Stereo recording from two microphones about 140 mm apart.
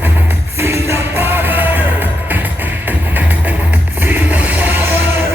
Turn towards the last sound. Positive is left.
turn(degrees=-15)  # may be behind; listen again after turning